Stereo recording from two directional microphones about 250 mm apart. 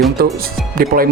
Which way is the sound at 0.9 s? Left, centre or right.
Right.